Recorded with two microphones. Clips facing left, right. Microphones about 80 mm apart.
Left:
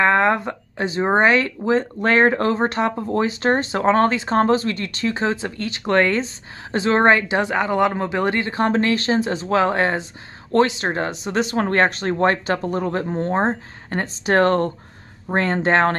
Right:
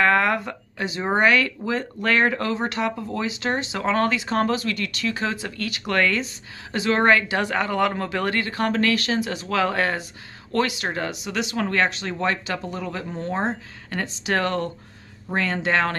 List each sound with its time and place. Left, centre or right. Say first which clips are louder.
0.0 s speech: left 3 dB; left